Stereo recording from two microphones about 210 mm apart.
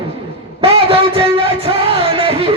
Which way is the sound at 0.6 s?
25° right (ahead or behind).